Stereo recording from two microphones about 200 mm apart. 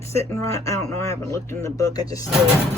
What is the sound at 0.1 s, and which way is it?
Speech, 15° left (ahead or behind).